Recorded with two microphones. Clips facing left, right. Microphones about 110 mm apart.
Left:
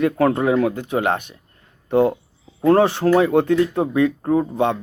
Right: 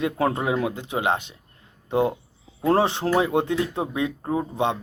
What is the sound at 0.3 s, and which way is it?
Speech, 20° right (ahead or behind).